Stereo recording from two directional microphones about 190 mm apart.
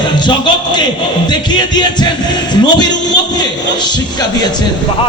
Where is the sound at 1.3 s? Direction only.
20° left (ahead or behind).